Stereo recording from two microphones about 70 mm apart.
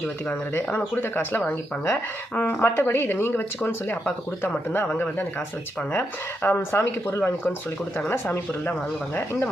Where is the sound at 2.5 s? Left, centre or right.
Left.